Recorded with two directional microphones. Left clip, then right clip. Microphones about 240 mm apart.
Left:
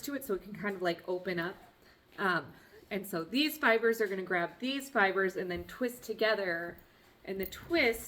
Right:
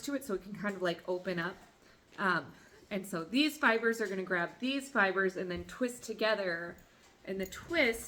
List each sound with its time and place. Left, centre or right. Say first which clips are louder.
0.0 s a woman's voice: left 1 dB; centre